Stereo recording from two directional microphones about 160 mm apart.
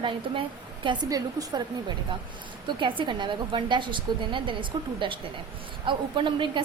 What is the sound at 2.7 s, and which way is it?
A woman's voice, 30° right (ahead or behind).